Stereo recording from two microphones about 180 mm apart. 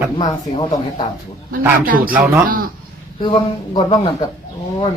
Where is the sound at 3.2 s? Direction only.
25° left (ahead or behind).